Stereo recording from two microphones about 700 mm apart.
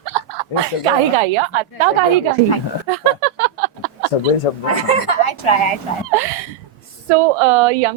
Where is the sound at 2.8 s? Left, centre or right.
Right.